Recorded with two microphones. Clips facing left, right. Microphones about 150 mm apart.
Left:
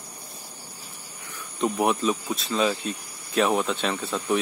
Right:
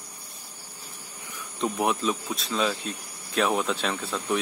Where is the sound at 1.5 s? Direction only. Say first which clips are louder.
Left 3 dB; centre (ahead or behind).